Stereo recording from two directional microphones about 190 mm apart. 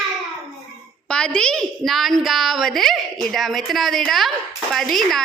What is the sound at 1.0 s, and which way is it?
A woman's voice, 5° left (ahead or behind).